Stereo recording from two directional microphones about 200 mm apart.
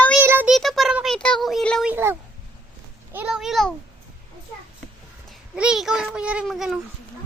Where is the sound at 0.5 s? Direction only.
Centre (ahead or behind).